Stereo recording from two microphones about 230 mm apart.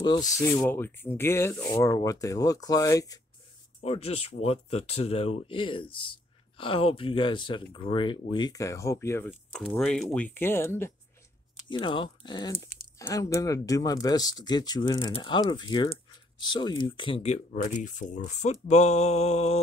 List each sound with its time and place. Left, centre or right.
0.0 s speech: centre
3.8 s speech: left; by 10.9 s centre
11.7 s speech: left